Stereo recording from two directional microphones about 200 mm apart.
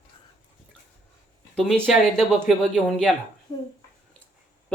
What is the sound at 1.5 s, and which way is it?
Speech, centre (ahead or behind).